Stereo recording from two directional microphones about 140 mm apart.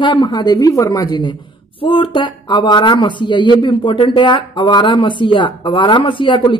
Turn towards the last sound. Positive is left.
turn(degrees=35)  # may be behind; listen again after turning